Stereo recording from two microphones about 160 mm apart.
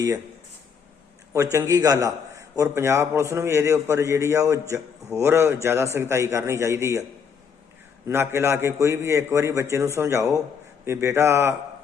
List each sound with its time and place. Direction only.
1.5 s a man's voice: 20° right (ahead or behind)
8.0 s a man's voice: 15° right (ahead or behind)